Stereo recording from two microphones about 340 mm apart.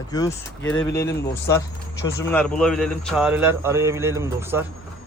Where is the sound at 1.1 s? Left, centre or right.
Left.